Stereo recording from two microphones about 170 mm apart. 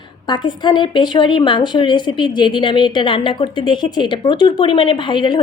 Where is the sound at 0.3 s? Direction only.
25° left (ahead or behind).